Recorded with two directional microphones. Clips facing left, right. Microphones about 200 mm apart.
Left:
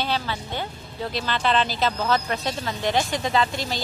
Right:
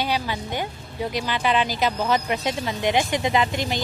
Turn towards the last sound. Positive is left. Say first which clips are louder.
# right 1 dB
turn(degrees=-20)  # may be behind; listen again after turning